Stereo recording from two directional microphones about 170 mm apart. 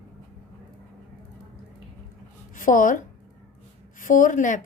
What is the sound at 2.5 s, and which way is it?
Speech, 50° left (ahead or behind).